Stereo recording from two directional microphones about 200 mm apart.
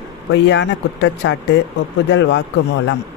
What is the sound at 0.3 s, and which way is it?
Speech, 65° left (ahead or behind).